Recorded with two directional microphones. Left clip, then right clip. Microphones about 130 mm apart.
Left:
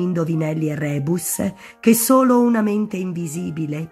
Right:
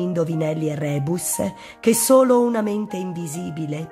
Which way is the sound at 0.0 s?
15° right (ahead or behind).